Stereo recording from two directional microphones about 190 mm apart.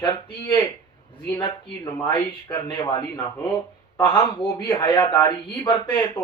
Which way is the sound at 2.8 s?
20° left (ahead or behind).